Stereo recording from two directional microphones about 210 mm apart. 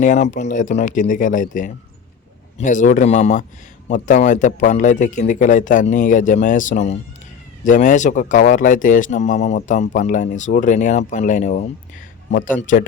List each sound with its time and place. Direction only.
0.0 s speech: 35° left (ahead or behind)